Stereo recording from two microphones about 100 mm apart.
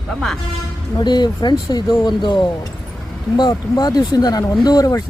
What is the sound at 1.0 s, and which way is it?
Speech, 45° left (ahead or behind).